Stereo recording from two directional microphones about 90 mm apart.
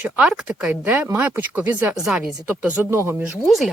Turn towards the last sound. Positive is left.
turn(degrees=0)  # may be behind; listen again after turning